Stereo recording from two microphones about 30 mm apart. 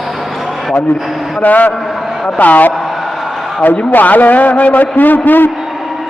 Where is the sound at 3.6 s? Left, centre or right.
Left.